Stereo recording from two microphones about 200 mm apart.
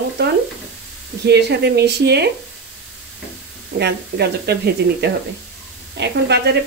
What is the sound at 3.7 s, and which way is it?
Speech, 55° right (ahead or behind).